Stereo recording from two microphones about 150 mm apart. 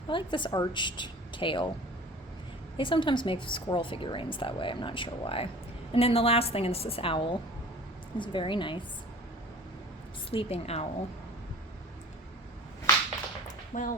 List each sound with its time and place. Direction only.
0.1 s a woman's voice: 35° left (ahead or behind)
2.7 s a woman's voice: 35° left (ahead or behind)
10.3 s a woman's voice: 45° left (ahead or behind)
13.7 s speech: 60° left (ahead or behind)